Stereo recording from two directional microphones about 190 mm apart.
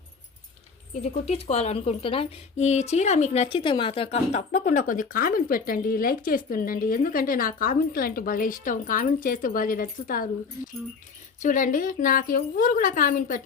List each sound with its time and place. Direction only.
1.0 s a woman's voice: 35° left (ahead or behind)
11.3 s a woman's voice: 45° left (ahead or behind)